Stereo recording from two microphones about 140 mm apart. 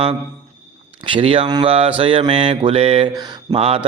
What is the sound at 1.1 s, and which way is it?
Mantra, 40° right (ahead or behind).